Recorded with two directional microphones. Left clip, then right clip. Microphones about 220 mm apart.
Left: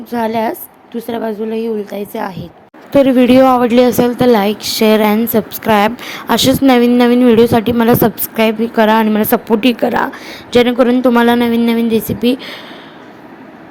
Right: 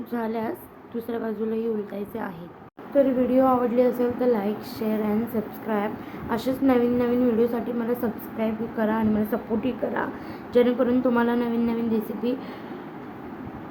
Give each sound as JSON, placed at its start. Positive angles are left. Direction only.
{"t": 0.1, "sound": "speech", "side_deg": 35}
{"t": 2.9, "sound": "a woman's voice", "side_deg": 45}